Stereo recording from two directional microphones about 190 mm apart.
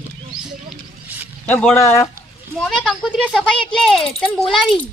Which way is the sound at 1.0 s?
10° right (ahead or behind).